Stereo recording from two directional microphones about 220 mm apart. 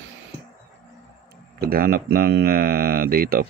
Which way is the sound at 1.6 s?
45° right (ahead or behind).